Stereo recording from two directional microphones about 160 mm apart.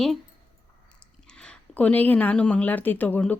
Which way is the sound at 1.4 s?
10° left (ahead or behind).